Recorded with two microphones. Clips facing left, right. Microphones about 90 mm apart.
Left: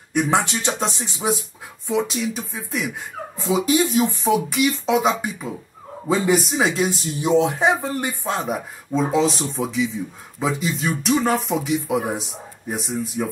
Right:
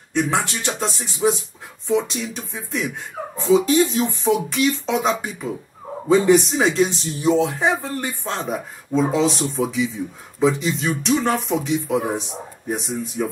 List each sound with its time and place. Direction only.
0.1 s speech: 15° left (ahead or behind)
1.9 s speech: centre (ahead or behind)
7.2 s speech: 20° left (ahead or behind); by 13.3 s centre (ahead or behind)